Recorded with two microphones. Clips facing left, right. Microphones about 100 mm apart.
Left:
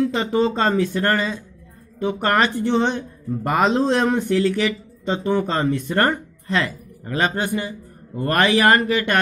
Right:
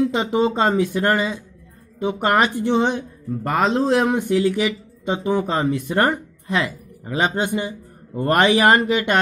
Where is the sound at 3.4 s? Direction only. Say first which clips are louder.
Left 1 dB; centre (ahead or behind).